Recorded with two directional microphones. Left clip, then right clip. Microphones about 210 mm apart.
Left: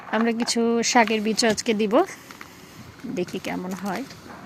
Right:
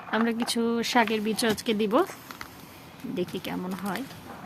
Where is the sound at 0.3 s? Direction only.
15° left (ahead or behind).